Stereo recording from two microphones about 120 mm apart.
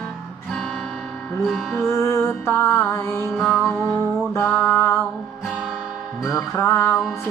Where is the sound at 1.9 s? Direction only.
25° left (ahead or behind).